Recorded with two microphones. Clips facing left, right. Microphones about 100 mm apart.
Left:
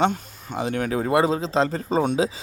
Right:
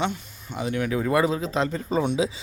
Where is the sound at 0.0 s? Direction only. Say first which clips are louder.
Left 6 dB; 45° left (ahead or behind).